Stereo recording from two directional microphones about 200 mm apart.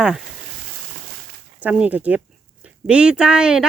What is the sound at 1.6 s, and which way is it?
Speech, 5° right (ahead or behind).